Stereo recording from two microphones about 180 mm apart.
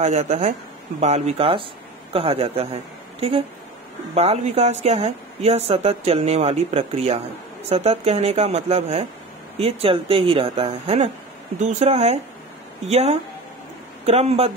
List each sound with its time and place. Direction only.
0.0 s a woman's voice: 40° right (ahead or behind)